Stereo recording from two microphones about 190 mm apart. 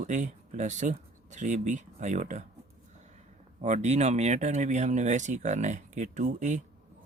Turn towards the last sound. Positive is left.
turn(degrees=-40)  # may be behind; listen again after turning